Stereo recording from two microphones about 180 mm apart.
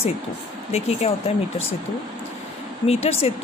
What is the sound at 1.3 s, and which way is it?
Speech, 35° left (ahead or behind).